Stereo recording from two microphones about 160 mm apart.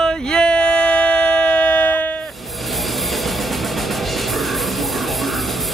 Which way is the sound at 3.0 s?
Centre (ahead or behind).